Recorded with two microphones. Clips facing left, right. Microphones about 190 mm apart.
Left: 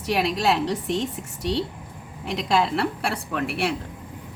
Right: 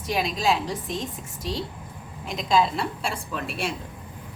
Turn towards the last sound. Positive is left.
turn(degrees=65)  # may be behind; listen again after turning